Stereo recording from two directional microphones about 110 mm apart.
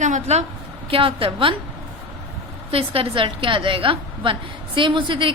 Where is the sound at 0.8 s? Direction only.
55° right (ahead or behind).